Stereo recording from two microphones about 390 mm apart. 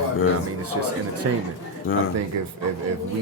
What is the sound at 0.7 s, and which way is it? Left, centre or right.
Speech, right.